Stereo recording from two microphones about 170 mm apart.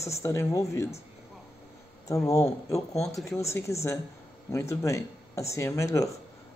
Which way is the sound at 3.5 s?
15° left (ahead or behind).